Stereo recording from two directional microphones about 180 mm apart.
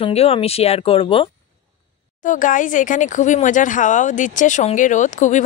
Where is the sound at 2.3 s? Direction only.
45° left (ahead or behind).